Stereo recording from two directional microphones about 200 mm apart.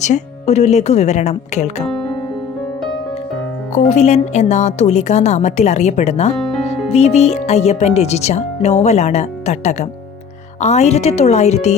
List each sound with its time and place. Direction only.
0.0 s speech: 35° left (ahead or behind)
3.8 s speech: 35° left (ahead or behind)
6.3 s music: centre (ahead or behind)
6.7 s speech: 30° left (ahead or behind)